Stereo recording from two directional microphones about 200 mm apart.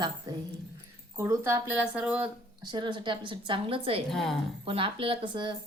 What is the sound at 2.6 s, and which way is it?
A woman's voice, 25° right (ahead or behind).